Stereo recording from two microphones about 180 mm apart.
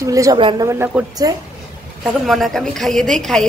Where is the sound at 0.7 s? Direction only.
15° right (ahead or behind).